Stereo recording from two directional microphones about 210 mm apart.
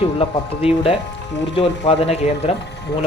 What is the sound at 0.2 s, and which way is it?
Speech, 25° left (ahead or behind).